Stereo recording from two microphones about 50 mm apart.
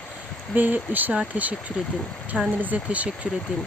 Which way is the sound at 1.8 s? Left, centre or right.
Centre.